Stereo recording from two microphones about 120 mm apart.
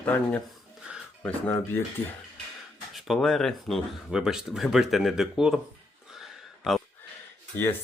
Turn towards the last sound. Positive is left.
turn(degrees=20)  # may be behind; listen again after turning